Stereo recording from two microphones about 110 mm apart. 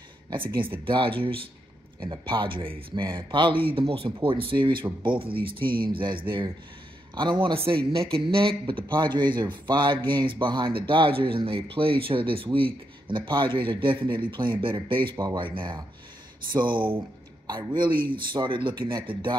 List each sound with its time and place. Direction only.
0.8 s speech: 50° right (ahead or behind)